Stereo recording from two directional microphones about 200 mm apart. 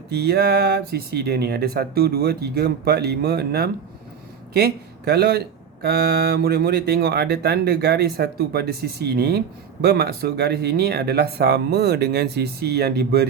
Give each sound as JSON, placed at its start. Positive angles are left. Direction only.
{"t": 0.1, "sound": "speech", "side_deg": -55}